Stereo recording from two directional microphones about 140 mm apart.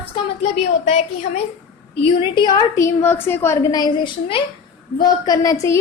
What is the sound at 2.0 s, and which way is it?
A woman's voice, 30° left (ahead or behind).